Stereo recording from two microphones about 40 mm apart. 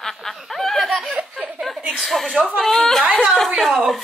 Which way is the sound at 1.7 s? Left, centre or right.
Centre.